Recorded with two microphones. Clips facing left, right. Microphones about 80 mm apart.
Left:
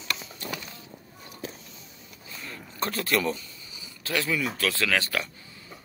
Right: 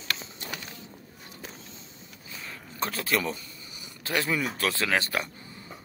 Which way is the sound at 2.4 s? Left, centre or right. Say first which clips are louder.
Left 1 dB; centre.